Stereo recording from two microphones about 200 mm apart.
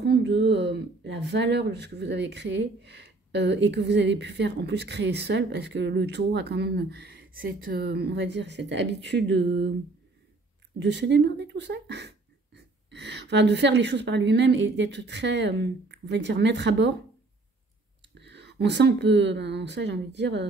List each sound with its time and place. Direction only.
0.0 s speech: 60° right (ahead or behind)
10.8 s speech: 60° right (ahead or behind)
18.2 s speech: 60° right (ahead or behind)